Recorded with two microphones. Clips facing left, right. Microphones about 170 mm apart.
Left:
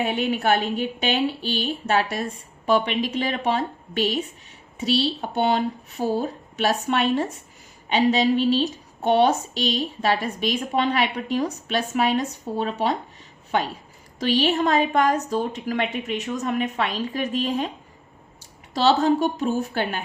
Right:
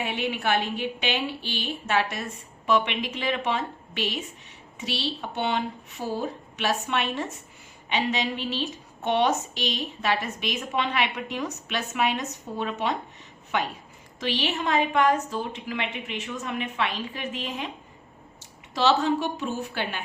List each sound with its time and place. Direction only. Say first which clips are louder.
0.0 s a woman's voice: left 5 dB; 40° left (ahead or behind)
18.7 s a woman's voice: left 4 dB; 35° left (ahead or behind)